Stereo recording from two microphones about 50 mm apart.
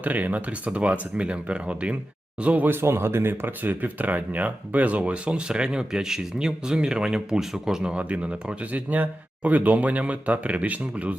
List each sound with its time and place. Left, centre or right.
0.0 s speech: right
2.6 s speech: right; by 7.9 s centre
7.9 s speech: right